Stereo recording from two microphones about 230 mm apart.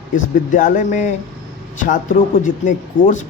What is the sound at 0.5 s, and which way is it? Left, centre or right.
Speech, left.